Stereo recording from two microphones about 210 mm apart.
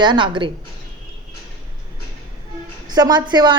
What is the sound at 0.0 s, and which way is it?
Speech, 20° right (ahead or behind).